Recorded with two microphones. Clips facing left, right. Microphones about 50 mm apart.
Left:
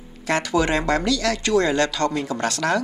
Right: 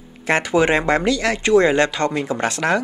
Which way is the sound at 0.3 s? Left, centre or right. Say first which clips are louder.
Right 4 dB; right.